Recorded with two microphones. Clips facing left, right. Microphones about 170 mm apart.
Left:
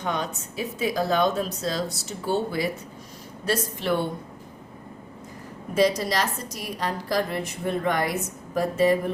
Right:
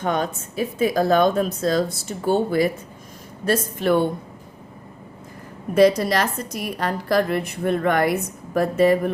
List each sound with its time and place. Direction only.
0.0 s speech: 50° right (ahead or behind)
5.7 s a woman's voice: 60° right (ahead or behind)